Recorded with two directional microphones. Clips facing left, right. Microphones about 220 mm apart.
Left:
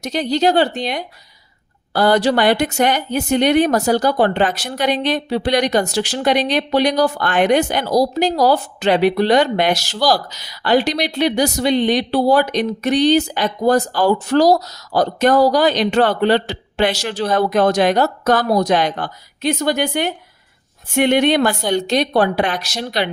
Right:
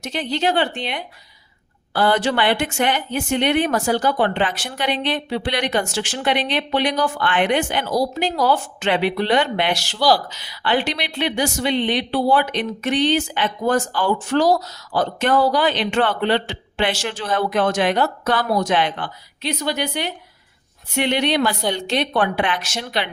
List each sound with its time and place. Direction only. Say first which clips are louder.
0.0 s speech: left 5 dB; 40° left (ahead or behind)